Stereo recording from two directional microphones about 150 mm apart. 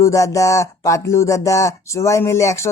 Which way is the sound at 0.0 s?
20° left (ahead or behind).